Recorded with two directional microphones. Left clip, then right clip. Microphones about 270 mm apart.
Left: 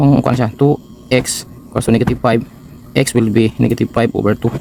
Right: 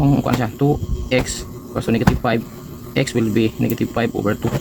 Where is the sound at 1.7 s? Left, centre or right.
Left.